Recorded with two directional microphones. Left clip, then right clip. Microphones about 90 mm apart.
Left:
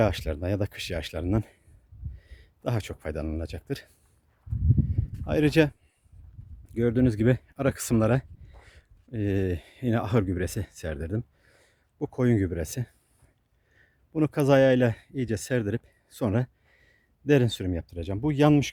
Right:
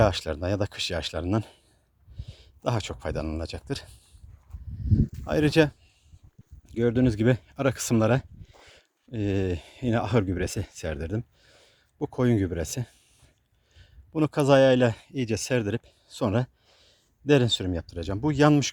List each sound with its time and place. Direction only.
0.0 s speech: 35° left (ahead or behind)
4.9 s a sound: 45° left (ahead or behind)
6.7 s speech: 30° left (ahead or behind)
11.1 s a sound: 35° left (ahead or behind)
11.9 s speech: 25° left (ahead or behind)
15.1 s speech: 15° left (ahead or behind)